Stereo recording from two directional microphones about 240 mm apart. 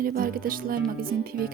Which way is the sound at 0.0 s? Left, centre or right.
Right.